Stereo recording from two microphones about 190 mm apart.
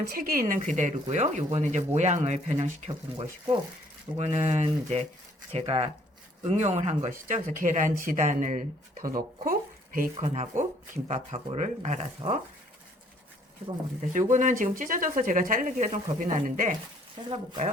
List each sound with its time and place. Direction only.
0.1 s speech: 45° right (ahead or behind)
14.1 s speech: 40° right (ahead or behind)
17.2 s speech: 30° right (ahead or behind)